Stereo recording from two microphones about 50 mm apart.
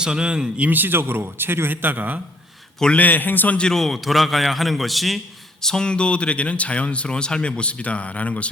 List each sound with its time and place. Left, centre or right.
0.0 s speech: centre
0.7 s a man's voice: right
2.9 s a man's voice: left
3.7 s a man's voice: centre
5.6 s speech: centre